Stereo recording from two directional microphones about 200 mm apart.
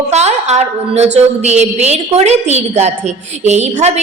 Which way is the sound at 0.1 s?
35° right (ahead or behind).